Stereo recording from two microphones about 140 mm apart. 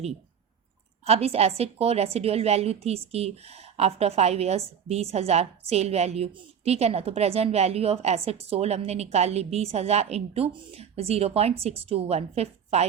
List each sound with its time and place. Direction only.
1.0 s a woman's voice: 45° right (ahead or behind)